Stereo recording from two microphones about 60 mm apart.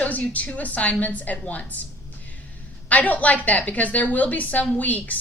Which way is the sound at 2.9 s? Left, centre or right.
Left.